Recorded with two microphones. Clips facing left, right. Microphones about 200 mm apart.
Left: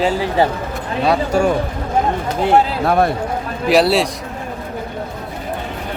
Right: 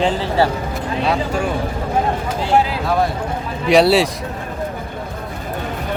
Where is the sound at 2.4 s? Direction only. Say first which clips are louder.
Left 3 dB; 55° left (ahead or behind).